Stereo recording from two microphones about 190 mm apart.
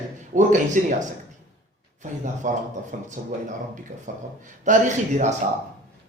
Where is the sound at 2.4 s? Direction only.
45° right (ahead or behind).